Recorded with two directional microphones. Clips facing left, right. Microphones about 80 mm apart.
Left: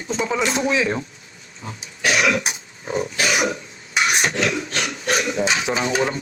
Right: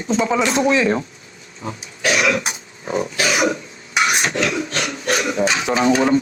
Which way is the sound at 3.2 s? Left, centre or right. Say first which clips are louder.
Right 3 dB; right.